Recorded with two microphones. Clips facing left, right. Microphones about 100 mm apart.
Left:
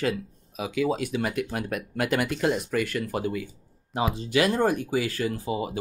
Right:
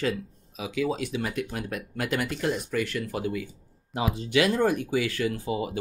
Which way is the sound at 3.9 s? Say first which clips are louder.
Left 1 dB; 30° left (ahead or behind).